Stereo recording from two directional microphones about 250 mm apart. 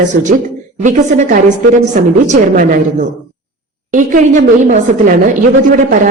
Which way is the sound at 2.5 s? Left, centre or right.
Right.